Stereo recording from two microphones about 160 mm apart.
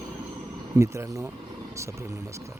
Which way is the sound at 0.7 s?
20° right (ahead or behind).